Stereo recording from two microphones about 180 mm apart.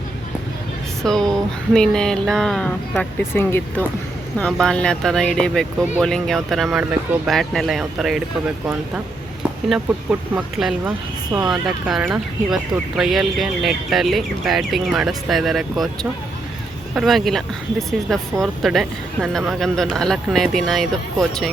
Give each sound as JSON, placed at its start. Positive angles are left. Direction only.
{"t": 1.0, "sound": "speech", "side_deg": 0}
{"t": 9.6, "sound": "speech", "side_deg": -5}
{"t": 16.9, "sound": "speech", "side_deg": 0}